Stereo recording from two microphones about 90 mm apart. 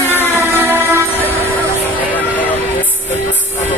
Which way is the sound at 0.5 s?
25° right (ahead or behind).